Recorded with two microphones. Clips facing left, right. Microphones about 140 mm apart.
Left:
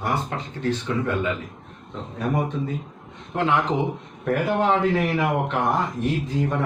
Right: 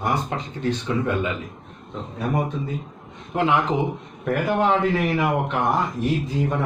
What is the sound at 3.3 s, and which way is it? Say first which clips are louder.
Speech: right 1 dB; 10° right (ahead or behind).